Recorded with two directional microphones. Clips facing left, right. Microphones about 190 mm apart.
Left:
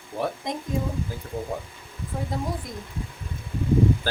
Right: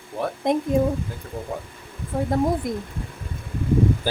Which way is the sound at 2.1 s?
55° right (ahead or behind).